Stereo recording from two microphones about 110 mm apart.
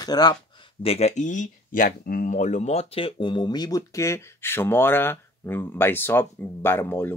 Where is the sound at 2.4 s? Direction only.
90° left; by 7.2 s 20° left (ahead or behind).